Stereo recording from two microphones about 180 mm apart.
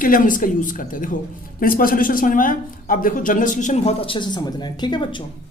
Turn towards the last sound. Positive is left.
turn(degrees=25)  # may be behind; listen again after turning